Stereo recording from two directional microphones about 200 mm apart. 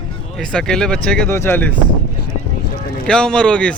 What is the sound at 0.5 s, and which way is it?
Speech, 5° left (ahead or behind).